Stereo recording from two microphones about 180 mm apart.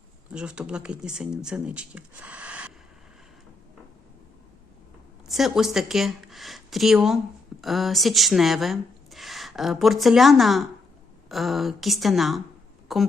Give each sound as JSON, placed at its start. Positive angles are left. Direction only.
{"t": 0.3, "sound": "speech", "side_deg": -5}
{"t": 5.3, "sound": "a woman's voice", "side_deg": 0}